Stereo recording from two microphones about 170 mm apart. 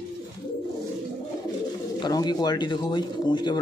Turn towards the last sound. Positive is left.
turn(degrees=25)  # may be behind; listen again after turning